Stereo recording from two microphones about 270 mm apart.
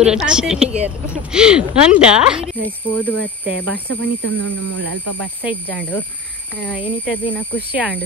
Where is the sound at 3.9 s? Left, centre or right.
Right.